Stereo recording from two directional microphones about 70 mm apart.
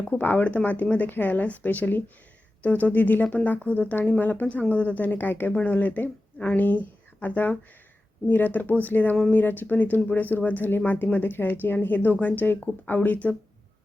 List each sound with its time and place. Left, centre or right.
0.1 s speech: left